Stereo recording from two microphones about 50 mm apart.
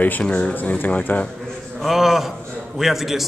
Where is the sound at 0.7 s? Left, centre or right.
Left.